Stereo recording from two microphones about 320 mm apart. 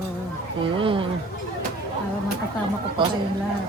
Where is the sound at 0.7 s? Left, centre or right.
Centre.